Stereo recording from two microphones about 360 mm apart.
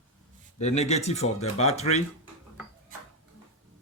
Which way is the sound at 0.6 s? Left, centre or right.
Centre.